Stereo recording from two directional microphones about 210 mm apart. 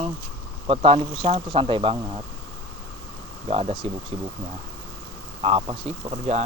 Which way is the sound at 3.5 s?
30° right (ahead or behind).